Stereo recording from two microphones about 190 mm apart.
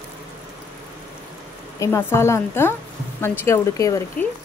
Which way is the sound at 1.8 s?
10° left (ahead or behind).